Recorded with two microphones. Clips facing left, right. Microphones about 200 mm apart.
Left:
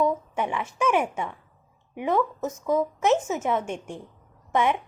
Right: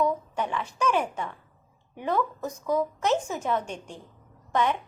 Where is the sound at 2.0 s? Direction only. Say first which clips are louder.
Left 3 dB; 20° left (ahead or behind).